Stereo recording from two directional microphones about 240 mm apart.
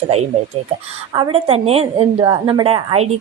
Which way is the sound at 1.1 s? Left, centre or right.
Right.